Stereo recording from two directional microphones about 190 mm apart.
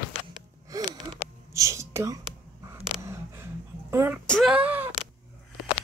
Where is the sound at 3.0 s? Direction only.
15° right (ahead or behind).